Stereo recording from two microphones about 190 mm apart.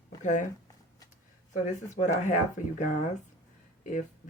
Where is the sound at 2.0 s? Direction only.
40° left (ahead or behind).